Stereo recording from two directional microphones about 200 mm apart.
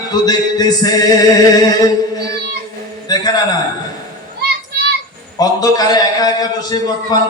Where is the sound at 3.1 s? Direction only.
20° left (ahead or behind).